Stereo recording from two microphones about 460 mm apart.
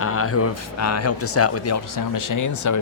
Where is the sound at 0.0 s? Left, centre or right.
Left.